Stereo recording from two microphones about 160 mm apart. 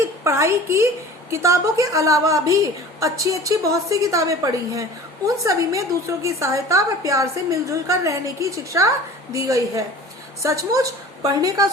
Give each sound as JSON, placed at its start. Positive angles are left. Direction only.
{"t": 0.0, "sound": "a woman's voice", "side_deg": -15}